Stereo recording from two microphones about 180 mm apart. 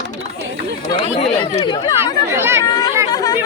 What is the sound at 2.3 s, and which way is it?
Speech, 15° right (ahead or behind).